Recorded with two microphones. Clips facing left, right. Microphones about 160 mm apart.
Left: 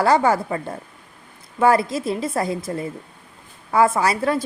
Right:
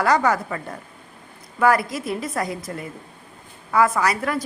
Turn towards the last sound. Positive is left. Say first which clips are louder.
# left 2 dB
turn(degrees=30)  # may be behind; listen again after turning